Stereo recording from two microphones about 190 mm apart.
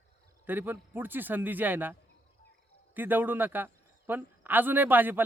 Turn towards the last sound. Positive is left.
turn(degrees=-10)  # may be behind; listen again after turning